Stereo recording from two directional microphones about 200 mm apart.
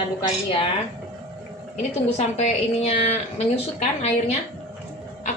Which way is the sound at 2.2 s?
35° left (ahead or behind).